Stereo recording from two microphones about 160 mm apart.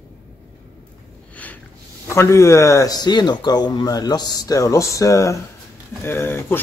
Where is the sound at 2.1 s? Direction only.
15° left (ahead or behind).